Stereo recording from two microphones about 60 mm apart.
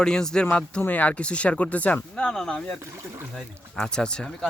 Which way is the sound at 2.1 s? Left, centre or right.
Centre.